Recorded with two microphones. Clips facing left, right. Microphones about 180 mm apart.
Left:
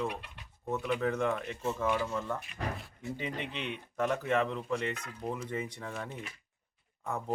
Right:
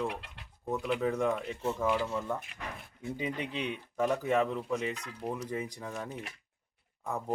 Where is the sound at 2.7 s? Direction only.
55° right (ahead or behind).